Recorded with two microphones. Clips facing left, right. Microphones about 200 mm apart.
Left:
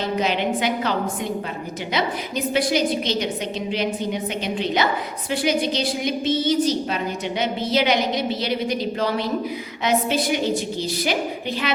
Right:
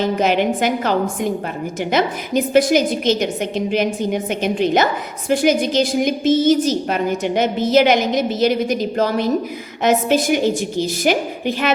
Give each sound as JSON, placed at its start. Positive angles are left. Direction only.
{"t": 0.2, "sound": "a woman's voice", "side_deg": -45}